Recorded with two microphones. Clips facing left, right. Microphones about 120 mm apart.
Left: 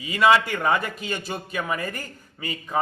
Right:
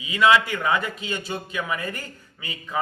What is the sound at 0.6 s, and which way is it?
A man's voice, 45° left (ahead or behind).